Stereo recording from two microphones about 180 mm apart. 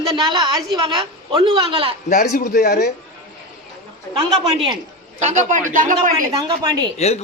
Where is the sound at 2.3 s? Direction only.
55° left (ahead or behind).